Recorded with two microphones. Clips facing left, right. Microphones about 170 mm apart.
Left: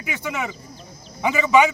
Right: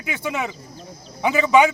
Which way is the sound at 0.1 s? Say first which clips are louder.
Right 2 dB; 15° right (ahead or behind).